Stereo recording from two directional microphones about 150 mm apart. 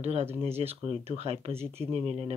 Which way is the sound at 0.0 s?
45° right (ahead or behind).